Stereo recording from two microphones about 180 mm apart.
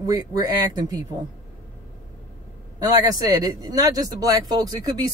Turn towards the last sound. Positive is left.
turn(degrees=-20)  # may be behind; listen again after turning